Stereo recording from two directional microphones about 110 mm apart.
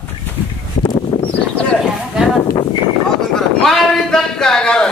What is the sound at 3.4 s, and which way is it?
A man's voice, 5° left (ahead or behind).